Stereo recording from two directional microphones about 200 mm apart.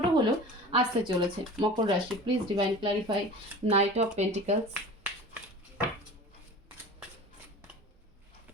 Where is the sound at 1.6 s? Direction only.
25° right (ahead or behind).